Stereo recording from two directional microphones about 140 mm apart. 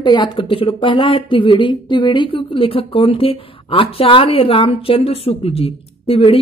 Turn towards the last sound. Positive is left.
turn(degrees=45)  # may be behind; listen again after turning